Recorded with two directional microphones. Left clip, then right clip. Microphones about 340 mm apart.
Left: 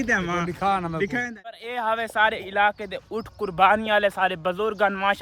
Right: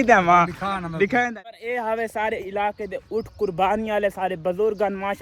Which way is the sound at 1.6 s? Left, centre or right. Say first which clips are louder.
Right 1 dB; centre.